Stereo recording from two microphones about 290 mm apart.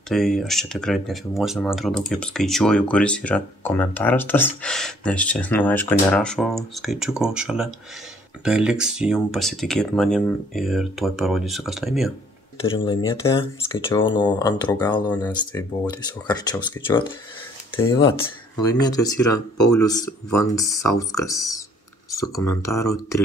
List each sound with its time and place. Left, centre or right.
0.1 s speech: centre
12.6 s speech: centre
19.3 s speech: left
19.7 s speech: centre